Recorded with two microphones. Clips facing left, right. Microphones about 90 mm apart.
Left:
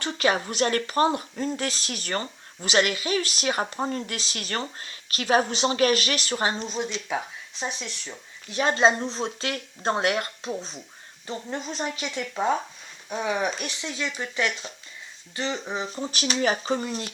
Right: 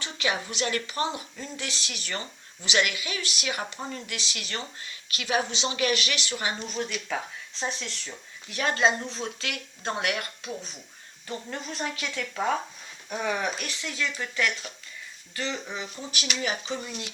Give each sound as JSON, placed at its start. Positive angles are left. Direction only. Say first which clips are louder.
{"t": 0.0, "sound": "speech", "louder": "left 6 dB", "side_deg": 45}
{"t": 6.7, "sound": "speech", "louder": "left 2 dB", "side_deg": 20}
{"t": 11.3, "sound": "speech", "louder": "left 3 dB", "side_deg": 20}